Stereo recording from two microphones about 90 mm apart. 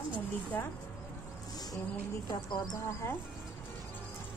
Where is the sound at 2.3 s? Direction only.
55° left (ahead or behind).